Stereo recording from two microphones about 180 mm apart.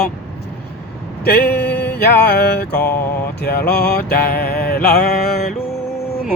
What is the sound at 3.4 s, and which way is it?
Music, 65° left (ahead or behind).